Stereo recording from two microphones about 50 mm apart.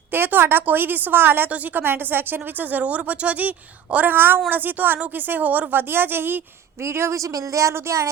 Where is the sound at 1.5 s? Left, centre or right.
Right.